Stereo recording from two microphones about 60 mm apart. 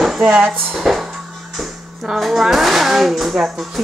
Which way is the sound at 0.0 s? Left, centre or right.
Centre.